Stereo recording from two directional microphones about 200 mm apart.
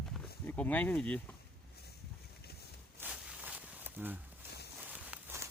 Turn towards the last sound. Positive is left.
turn(degrees=-10)  # may be behind; listen again after turning